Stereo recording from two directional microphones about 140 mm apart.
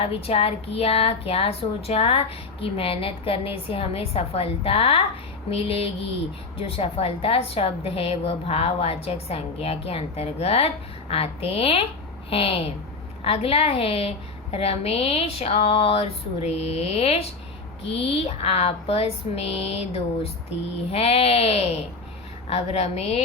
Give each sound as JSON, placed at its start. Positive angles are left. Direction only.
{"t": 0.0, "sound": "a woman's voice", "side_deg": 45}